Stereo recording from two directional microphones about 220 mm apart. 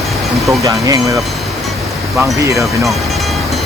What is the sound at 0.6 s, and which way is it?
Speech, 15° right (ahead or behind).